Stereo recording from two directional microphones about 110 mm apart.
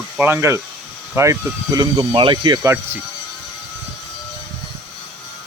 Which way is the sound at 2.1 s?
50° right (ahead or behind).